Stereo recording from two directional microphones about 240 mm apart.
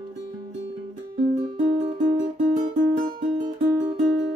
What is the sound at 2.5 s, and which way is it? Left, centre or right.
Music, right.